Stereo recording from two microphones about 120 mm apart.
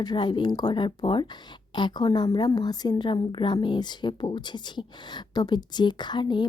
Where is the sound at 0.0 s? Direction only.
40° left (ahead or behind).